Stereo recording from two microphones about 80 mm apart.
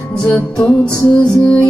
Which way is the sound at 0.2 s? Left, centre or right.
Centre.